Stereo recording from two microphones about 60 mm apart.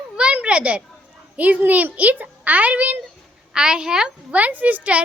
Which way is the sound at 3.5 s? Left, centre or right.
Centre.